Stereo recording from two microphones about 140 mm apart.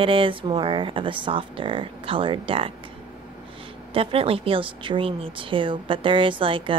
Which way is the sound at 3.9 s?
40° right (ahead or behind).